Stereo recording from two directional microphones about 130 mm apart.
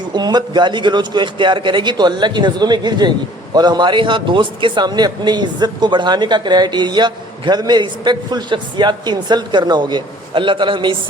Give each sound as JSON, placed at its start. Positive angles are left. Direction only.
{"t": 0.1, "sound": "a man's voice", "side_deg": -35}